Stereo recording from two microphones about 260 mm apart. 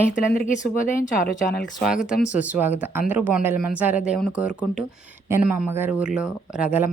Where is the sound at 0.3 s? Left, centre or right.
Left.